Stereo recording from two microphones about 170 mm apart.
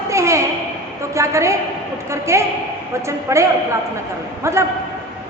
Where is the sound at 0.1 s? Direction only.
15° right (ahead or behind).